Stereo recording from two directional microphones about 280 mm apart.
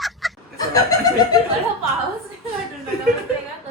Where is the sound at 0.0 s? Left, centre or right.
Centre.